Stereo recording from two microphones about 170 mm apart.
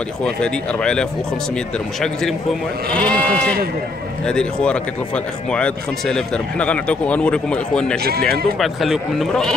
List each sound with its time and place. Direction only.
0.2 s speech: 5° left (ahead or behind)
2.9 s speech: 5° left (ahead or behind)
8.0 s speech: 65° right (ahead or behind)
8.5 s speech: centre (ahead or behind)